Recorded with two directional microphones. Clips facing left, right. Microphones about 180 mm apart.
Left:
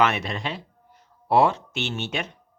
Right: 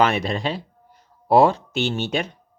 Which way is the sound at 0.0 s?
35° right (ahead or behind).